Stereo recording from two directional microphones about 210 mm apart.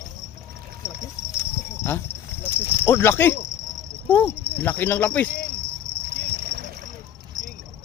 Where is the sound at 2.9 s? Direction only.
10° left (ahead or behind).